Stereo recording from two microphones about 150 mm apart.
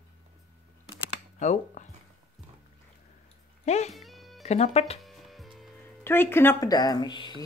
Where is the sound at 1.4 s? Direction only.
55° left (ahead or behind).